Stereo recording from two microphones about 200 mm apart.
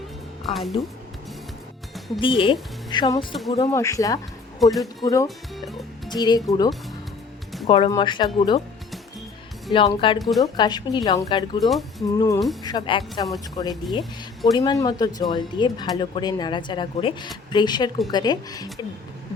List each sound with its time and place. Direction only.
0.4 s speech: centre (ahead or behind)
2.1 s speech: 25° left (ahead or behind)
4.6 s speech: centre (ahead or behind)
5.0 s speech: 15° left (ahead or behind)
5.5 s speech: centre (ahead or behind)
6.1 s speech: 20° left (ahead or behind)
9.7 s speech: 25° left (ahead or behind)
10.2 s speech: centre (ahead or behind)
10.4 s speech: 20° left (ahead or behind)
11.7 s speech: centre (ahead or behind)
12.1 s speech: 15° left (ahead or behind)